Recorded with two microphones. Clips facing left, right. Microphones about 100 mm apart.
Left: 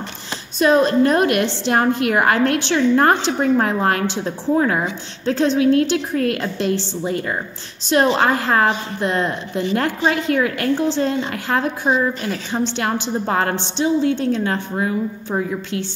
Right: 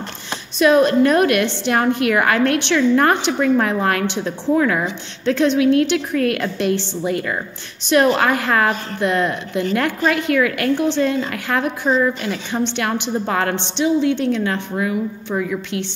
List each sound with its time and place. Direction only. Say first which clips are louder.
0.6 s a woman's voice: right 1 dB; 30° left (ahead or behind)
12.2 s a woman's voice: even; 20° right (ahead or behind)
12.5 s a woman's voice: even; 30° left (ahead or behind)